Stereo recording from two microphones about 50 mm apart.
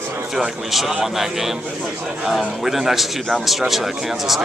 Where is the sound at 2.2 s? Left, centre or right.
Centre.